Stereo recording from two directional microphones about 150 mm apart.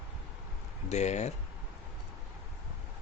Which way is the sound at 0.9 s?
50° left (ahead or behind).